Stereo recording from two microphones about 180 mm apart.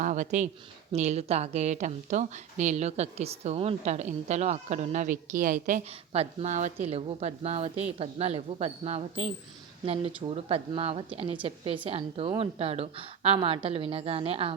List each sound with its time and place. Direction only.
0.0 s a woman's voice: 45° right (ahead or behind)